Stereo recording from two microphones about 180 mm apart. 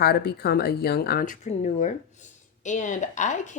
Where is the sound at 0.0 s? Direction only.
60° left (ahead or behind).